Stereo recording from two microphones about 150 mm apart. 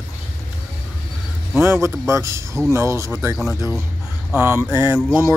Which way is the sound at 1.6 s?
20° right (ahead or behind).